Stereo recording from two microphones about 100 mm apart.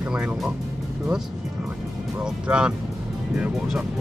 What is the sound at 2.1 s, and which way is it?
Speech, 10° right (ahead or behind).